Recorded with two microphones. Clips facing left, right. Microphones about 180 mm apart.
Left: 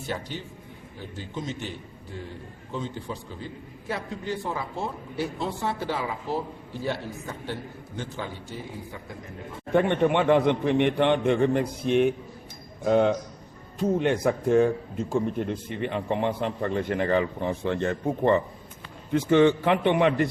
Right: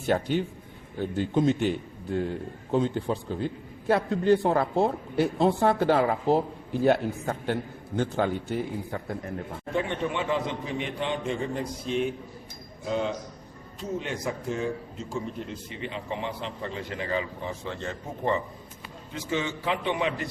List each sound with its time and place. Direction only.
0.1 s speech: 55° right (ahead or behind)
3.1 s a man's voice: 65° right (ahead or behind)
9.7 s a man's voice: 60° left (ahead or behind)